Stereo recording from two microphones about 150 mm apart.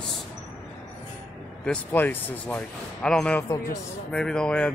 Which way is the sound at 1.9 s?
15° left (ahead or behind).